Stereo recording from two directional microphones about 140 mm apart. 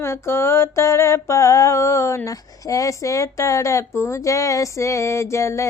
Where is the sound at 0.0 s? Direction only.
20° left (ahead or behind).